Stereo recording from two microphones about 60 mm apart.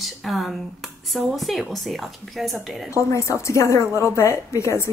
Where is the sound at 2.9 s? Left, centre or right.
Left.